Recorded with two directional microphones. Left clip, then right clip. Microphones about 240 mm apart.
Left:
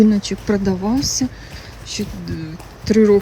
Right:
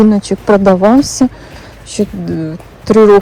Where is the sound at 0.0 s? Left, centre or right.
Centre.